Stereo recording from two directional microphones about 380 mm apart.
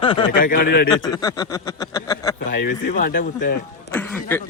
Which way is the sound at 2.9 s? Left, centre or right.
Left.